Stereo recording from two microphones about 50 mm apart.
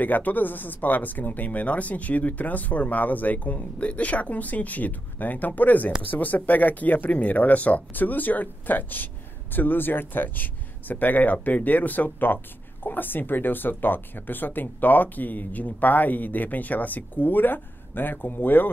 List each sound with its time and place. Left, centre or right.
0.0 s speech: left